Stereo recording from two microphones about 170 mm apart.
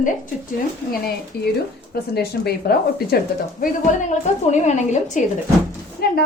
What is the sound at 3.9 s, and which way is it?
A woman's voice, 50° left (ahead or behind).